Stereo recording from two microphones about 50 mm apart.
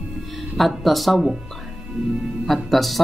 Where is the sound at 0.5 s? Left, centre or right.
Centre.